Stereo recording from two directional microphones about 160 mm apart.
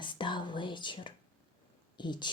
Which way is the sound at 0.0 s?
30° left (ahead or behind).